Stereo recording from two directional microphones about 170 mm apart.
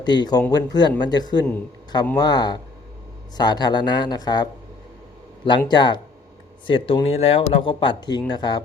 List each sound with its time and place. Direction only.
0.0 s speech: 25° left (ahead or behind)
5.5 s speech: 25° left (ahead or behind)